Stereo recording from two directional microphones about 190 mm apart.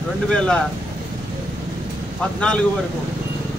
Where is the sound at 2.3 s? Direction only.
5° left (ahead or behind).